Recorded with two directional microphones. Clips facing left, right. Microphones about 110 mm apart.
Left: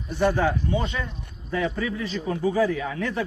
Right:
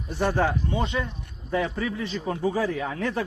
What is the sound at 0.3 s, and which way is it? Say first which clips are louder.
Speech: left 1 dB; 35° right (ahead or behind).